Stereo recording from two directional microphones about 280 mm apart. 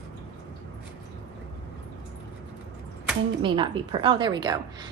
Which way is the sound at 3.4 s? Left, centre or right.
Centre.